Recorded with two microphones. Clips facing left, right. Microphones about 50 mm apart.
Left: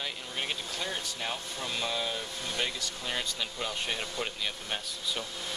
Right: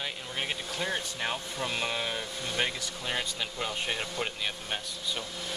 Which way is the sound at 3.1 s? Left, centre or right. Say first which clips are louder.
Right 2 dB; centre.